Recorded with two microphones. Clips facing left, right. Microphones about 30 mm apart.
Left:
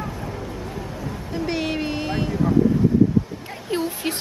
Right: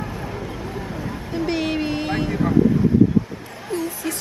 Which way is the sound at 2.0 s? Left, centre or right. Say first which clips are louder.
Right 2 dB; centre.